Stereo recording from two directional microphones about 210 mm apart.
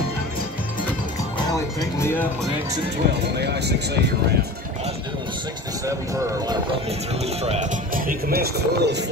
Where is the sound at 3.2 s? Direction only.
55° right (ahead or behind).